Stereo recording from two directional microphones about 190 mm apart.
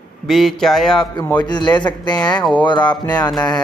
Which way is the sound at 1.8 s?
25° left (ahead or behind).